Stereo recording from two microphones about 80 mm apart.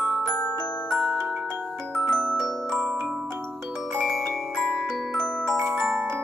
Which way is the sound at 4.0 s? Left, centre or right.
Centre.